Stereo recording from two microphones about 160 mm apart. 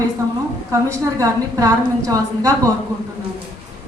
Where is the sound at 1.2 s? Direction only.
20° right (ahead or behind).